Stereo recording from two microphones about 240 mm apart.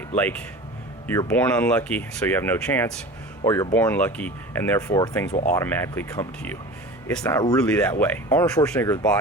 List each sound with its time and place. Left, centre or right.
0.2 s speech: centre
5.3 s speech: left
5.5 s speech: centre
7.3 s speech: centre